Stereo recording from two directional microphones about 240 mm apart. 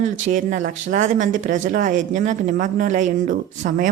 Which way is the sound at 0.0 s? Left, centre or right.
Right.